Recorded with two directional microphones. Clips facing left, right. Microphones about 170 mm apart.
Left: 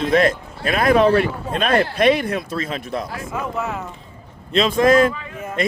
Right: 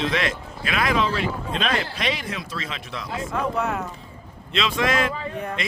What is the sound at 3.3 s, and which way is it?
Speech, centre (ahead or behind).